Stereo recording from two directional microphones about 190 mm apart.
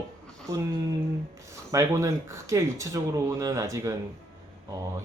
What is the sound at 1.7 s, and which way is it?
Speech, 15° right (ahead or behind).